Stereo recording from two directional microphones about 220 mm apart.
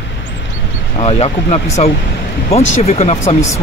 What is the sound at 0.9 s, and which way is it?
Speech, 30° left (ahead or behind).